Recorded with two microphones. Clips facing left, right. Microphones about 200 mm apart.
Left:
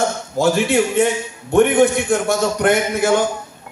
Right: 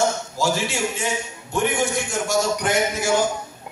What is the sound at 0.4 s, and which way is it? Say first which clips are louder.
A man's voice: left 9 dB; 60° left (ahead or behind).